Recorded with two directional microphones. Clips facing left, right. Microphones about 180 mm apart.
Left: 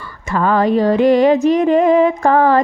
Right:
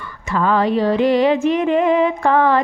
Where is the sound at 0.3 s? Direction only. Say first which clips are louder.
Left 2 dB; 45° left (ahead or behind).